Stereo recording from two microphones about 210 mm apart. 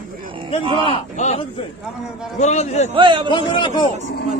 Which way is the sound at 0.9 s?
30° left (ahead or behind).